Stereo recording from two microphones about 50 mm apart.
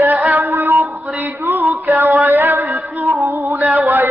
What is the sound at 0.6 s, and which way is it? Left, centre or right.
Speech, right.